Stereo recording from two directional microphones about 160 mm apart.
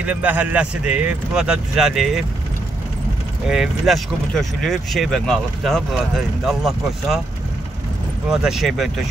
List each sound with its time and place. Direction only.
0.0 s speech: 10° right (ahead or behind)
3.4 s speech: 5° right (ahead or behind)
8.3 s speech: 5° right (ahead or behind)